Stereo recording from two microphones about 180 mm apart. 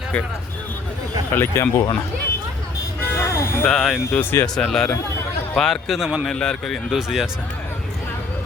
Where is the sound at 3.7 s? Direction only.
Centre (ahead or behind).